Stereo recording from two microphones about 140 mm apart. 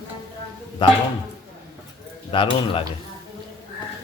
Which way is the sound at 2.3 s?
35° left (ahead or behind).